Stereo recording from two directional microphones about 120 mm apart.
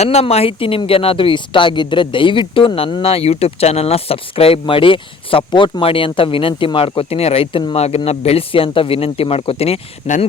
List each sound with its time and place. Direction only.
0.0 s speech: 60° left (ahead or behind)